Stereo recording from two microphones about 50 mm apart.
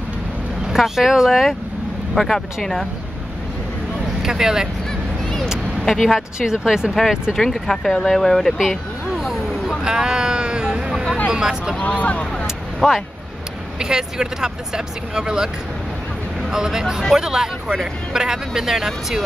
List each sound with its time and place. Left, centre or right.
0.7 s speech: centre
2.1 s speech: centre
4.2 s speech: centre
5.8 s speech: centre
6.4 s speech: centre
7.3 s speech: centre
8.5 s a sound: centre
11.2 s speech: centre
11.8 s speech: left
12.8 s speech: centre
13.7 s speech: centre